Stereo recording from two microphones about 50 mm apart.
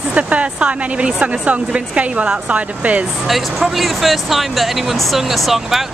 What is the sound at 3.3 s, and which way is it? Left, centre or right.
Speech, centre.